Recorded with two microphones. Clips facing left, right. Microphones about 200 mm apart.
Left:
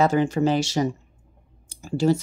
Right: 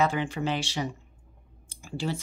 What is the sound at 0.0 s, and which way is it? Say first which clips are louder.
Speech: left 7 dB; 40° left (ahead or behind).